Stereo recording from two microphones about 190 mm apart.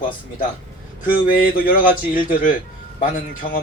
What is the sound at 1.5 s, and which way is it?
Speech, 50° left (ahead or behind).